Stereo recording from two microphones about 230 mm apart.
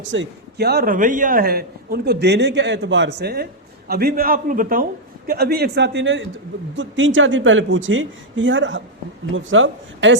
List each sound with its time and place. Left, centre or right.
0.1 s a man's voice: right